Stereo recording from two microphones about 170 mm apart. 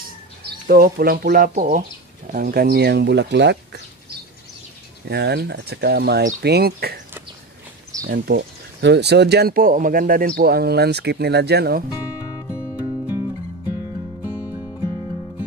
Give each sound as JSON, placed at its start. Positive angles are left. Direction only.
{"t": 0.7, "sound": "speech", "side_deg": -60}
{"t": 2.3, "sound": "speech", "side_deg": -60}
{"t": 5.0, "sound": "speech", "side_deg": -75}
{"t": 8.1, "sound": "speech", "side_deg": -80}
{"t": 12.4, "sound": "music", "side_deg": 15}